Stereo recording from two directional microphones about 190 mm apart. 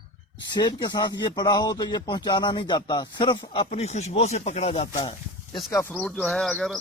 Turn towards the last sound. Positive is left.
turn(degrees=0)  # may be behind; listen again after turning